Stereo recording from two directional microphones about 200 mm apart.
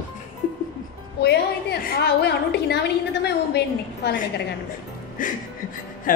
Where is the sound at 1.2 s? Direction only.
55° left (ahead or behind).